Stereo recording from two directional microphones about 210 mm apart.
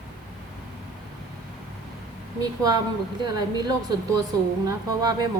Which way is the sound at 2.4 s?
20° right (ahead or behind).